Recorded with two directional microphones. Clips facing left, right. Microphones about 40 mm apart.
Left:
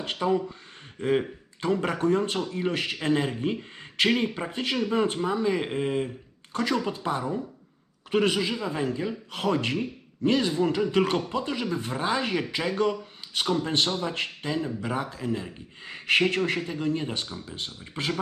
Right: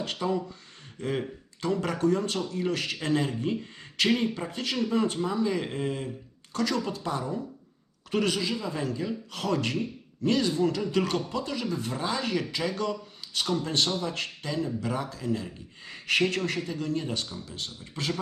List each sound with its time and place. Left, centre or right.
0.0 s speech: left